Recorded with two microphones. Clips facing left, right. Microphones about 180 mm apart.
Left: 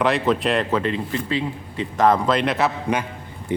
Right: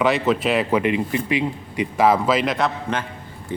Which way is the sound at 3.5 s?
20° left (ahead or behind).